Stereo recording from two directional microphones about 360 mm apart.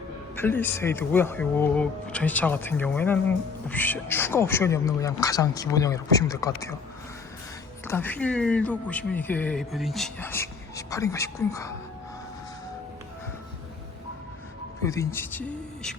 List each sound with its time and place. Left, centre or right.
0.3 s speech: centre
7.9 s speech: centre
14.8 s speech: centre